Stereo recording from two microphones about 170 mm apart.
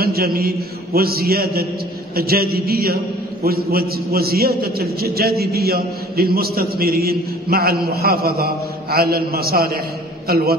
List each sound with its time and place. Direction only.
0.0 s a man's voice: 60° right (ahead or behind)